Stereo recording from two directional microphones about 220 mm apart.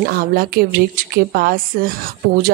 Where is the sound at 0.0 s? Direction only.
45° right (ahead or behind).